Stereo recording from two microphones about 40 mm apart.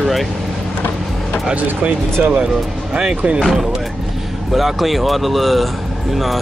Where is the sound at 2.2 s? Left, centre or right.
Right.